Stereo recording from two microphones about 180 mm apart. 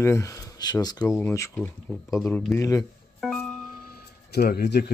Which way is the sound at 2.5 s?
15° left (ahead or behind).